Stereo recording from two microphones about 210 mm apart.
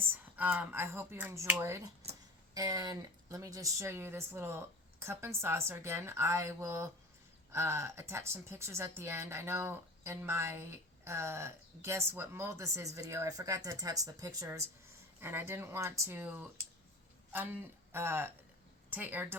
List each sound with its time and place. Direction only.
0.1 s speech: 10° right (ahead or behind)